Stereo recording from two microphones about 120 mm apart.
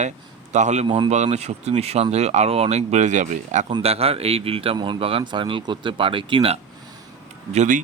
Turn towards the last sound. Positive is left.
turn(degrees=-80)